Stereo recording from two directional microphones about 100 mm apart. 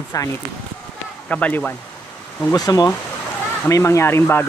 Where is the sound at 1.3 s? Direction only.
15° left (ahead or behind).